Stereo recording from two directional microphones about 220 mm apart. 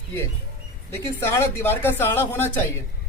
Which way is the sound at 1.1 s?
10° left (ahead or behind).